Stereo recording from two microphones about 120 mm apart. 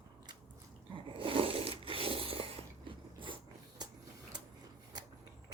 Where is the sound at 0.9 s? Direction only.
50° right (ahead or behind).